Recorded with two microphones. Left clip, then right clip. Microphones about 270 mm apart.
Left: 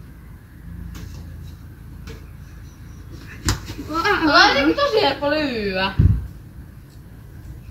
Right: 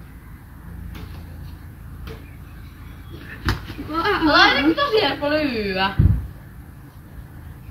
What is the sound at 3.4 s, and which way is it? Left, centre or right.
Bleat, left.